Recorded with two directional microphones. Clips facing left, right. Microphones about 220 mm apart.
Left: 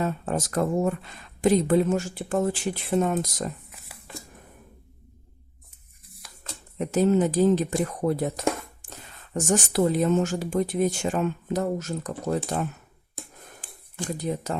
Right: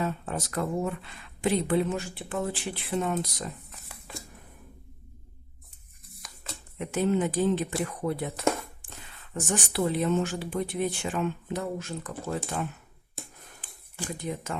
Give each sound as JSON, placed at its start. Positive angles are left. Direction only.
{"t": 0.0, "sound": "speech", "side_deg": 45}
{"t": 6.7, "sound": "speech", "side_deg": 40}
{"t": 14.2, "sound": "speech", "side_deg": 35}